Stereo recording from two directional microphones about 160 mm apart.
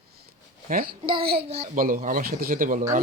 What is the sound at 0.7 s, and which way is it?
Speech, 65° right (ahead or behind).